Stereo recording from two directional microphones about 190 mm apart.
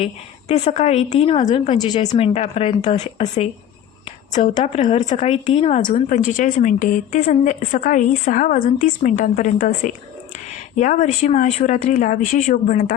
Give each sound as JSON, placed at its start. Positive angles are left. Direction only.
{"t": 0.0, "sound": "a woman's voice", "side_deg": 35}